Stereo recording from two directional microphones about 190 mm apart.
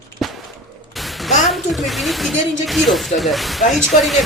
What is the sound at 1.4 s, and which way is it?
Speech, centre (ahead or behind).